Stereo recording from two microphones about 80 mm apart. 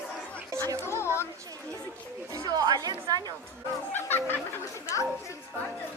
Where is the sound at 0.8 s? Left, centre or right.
Left.